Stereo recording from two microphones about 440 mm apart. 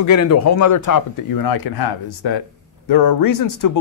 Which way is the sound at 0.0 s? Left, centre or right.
Left.